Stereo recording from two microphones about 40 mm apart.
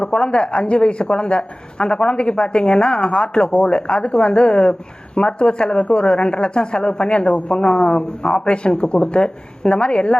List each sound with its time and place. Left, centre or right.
0.0 s a woman's voice: left